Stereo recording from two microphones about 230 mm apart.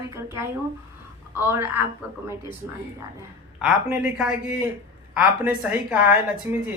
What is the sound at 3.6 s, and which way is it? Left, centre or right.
A woman's voice, centre.